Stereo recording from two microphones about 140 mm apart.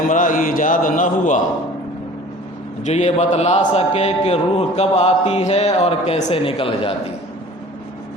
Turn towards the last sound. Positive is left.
turn(degrees=40)  # may be behind; listen again after turning